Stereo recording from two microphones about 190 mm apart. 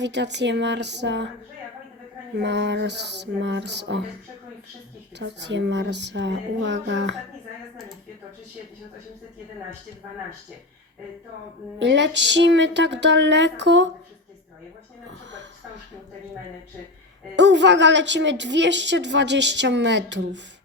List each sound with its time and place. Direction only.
0.0 s speech: 65° right (ahead or behind)
2.3 s speech: 65° right (ahead or behind)
5.1 s a woman's voice: 65° right (ahead or behind)
11.8 s a woman's voice: 70° right (ahead or behind)
15.0 s a woman's voice: 70° right (ahead or behind)
17.3 s a woman's voice: 70° right (ahead or behind)